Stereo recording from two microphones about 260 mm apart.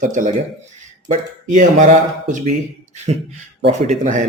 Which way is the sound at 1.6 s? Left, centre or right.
Right.